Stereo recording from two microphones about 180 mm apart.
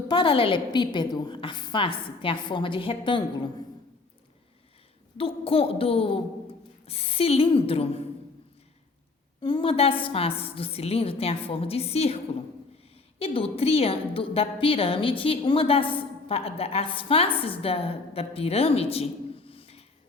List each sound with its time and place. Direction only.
0.1 s a woman's voice: 30° left (ahead or behind)
5.1 s a woman's voice: 30° left (ahead or behind)
9.4 s a woman's voice: 30° left (ahead or behind)
19.5 s a sound: 30° left (ahead or behind)